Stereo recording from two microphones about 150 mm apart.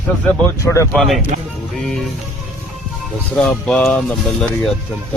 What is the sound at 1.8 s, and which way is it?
Music, centre (ahead or behind).